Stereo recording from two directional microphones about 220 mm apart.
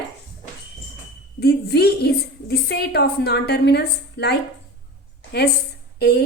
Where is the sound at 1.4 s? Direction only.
45° left (ahead or behind).